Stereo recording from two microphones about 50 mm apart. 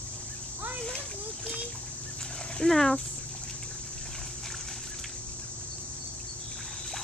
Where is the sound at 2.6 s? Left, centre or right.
Centre.